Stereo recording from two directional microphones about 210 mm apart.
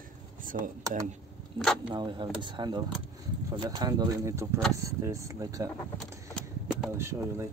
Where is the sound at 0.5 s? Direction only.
40° right (ahead or behind).